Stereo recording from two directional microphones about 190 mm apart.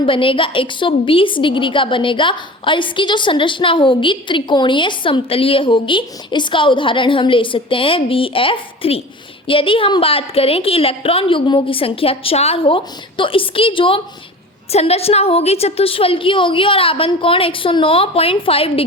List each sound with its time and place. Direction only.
0.0 s a woman's voice: 25° left (ahead or behind)